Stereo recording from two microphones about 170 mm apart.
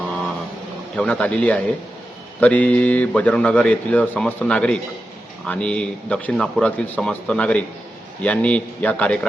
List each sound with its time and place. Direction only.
0.9 s a man's voice: 5° left (ahead or behind)